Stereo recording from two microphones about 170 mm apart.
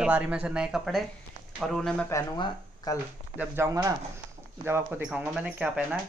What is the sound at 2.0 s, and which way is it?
Speech, 20° left (ahead or behind).